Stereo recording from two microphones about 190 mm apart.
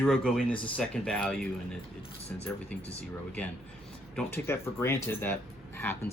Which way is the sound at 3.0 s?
5° left (ahead or behind).